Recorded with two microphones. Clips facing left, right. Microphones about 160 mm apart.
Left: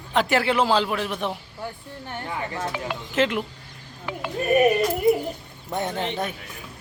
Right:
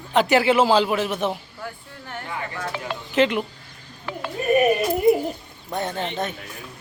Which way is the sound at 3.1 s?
Centre (ahead or behind).